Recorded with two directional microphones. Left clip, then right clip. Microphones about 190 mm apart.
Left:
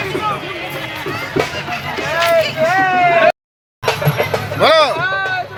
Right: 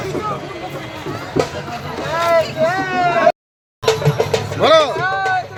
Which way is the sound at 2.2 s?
45° right (ahead or behind).